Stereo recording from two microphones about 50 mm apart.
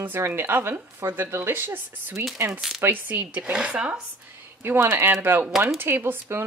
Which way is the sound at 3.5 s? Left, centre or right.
Right.